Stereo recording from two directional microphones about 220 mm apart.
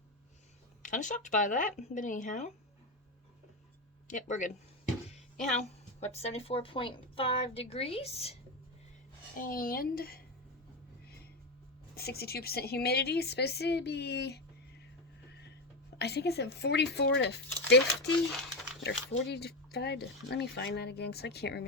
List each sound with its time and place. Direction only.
0.8 s speech: 35° left (ahead or behind)
4.1 s speech: 35° left (ahead or behind)
6.0 s a woman's voice: 30° left (ahead or behind)
9.3 s speech: 40° left (ahead or behind)
11.9 s speech: 45° left (ahead or behind)
15.3 s a sound: 50° left (ahead or behind)
16.0 s speech: 50° left (ahead or behind)